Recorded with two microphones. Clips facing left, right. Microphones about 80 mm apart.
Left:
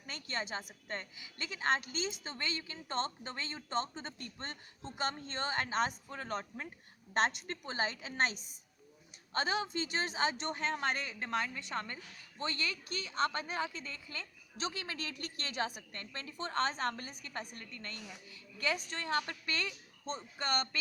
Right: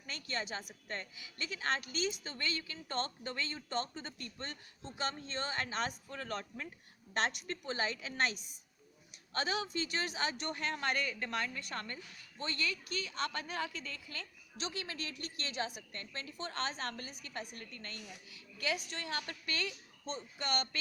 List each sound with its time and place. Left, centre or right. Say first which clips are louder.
0.0 s a woman's voice: even; left
12.4 s a woman's voice: even; left